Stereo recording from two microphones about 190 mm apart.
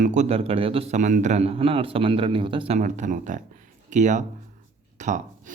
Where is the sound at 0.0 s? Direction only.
40° right (ahead or behind).